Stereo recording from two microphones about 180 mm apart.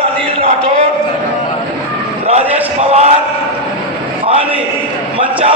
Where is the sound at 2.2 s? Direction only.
35° right (ahead or behind).